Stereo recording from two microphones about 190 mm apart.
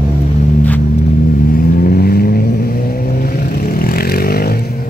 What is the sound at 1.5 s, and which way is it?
Vehicle, 50° left (ahead or behind).